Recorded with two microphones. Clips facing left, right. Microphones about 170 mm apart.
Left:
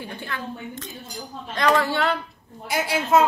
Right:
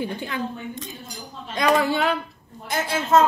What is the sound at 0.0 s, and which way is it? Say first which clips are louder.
A woman's voice: right 5 dB; 15° right (ahead or behind).